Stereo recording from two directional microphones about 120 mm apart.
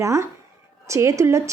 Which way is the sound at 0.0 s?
25° right (ahead or behind).